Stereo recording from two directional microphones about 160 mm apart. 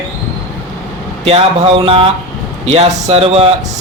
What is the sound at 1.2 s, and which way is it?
Speech, 35° right (ahead or behind).